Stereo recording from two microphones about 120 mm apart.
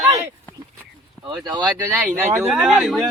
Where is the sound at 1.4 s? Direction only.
35° right (ahead or behind).